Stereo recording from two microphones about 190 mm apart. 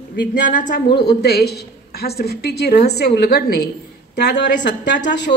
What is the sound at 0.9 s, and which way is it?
A woman's voice, 60° left (ahead or behind).